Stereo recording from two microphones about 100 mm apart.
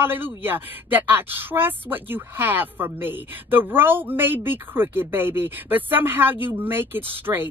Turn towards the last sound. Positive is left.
turn(degrees=-20)  # may be behind; listen again after turning